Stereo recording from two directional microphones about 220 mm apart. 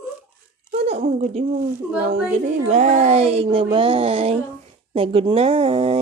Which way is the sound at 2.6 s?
30° right (ahead or behind).